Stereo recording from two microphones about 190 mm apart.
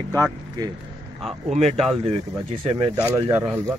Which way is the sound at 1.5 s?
35° right (ahead or behind).